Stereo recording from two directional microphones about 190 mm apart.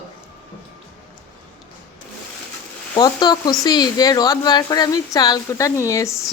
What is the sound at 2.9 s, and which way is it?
A woman's voice, 20° left (ahead or behind).